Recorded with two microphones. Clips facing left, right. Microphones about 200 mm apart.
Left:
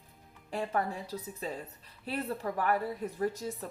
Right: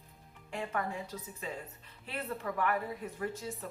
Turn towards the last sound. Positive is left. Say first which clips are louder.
# left 5 dB
turn(degrees=40)  # may be behind; listen again after turning